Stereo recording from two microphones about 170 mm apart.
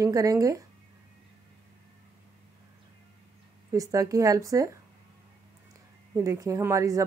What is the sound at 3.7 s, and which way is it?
Speech, 20° right (ahead or behind).